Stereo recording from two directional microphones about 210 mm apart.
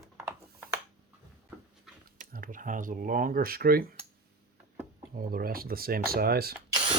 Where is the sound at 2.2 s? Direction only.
40° right (ahead or behind).